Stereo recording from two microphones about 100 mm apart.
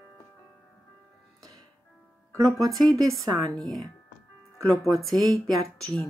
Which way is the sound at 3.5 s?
Centre (ahead or behind).